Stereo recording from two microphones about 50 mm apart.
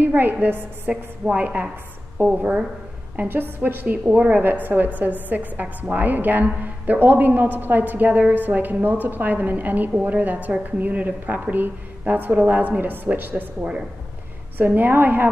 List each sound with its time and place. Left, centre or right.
0.0 s a woman's voice: right
2.1 s a woman's voice: right
4.0 s a woman's voice: right
4.3 s a woman's voice: right
13.6 s a woman's voice: centre
14.6 s a woman's voice: right